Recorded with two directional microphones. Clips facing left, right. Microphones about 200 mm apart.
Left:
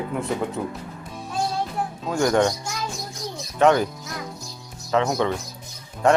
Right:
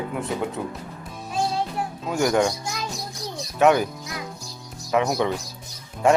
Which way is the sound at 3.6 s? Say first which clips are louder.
Even; 10° right (ahead or behind).